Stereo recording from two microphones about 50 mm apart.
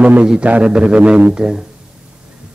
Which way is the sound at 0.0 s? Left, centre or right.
Right.